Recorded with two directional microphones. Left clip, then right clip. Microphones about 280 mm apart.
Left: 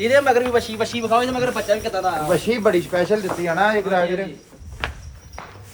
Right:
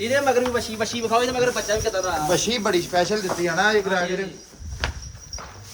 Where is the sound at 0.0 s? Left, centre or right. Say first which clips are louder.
Left 5 dB; centre.